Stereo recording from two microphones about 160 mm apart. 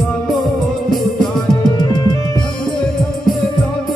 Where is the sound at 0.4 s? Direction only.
Centre (ahead or behind).